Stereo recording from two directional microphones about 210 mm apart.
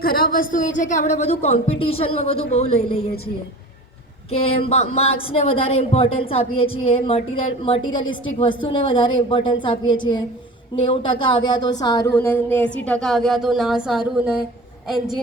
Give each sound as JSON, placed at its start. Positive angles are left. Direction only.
{"t": 0.0, "sound": "a woman's voice", "side_deg": 45}
{"t": 4.3, "sound": "a woman's voice", "side_deg": 25}